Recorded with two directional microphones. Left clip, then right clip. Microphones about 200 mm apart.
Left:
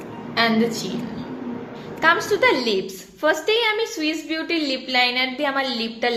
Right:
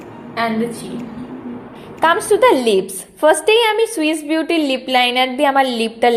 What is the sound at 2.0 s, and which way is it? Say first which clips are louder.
A woman's voice: right 5 dB; 35° right (ahead or behind).